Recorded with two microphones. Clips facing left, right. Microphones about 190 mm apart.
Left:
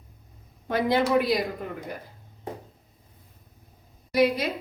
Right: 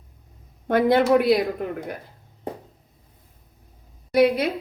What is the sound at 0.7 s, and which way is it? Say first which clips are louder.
Speech: right 5 dB; 55° right (ahead or behind).